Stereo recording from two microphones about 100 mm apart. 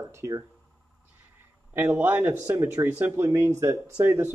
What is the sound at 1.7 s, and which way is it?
A man's voice, 20° right (ahead or behind).